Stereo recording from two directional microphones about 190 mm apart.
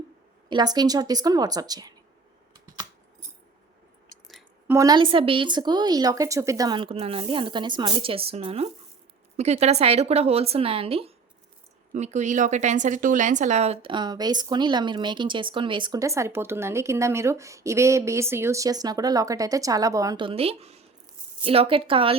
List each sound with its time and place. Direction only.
0.4 s a woman's voice: 20° right (ahead or behind)
4.7 s a woman's voice: 20° right (ahead or behind)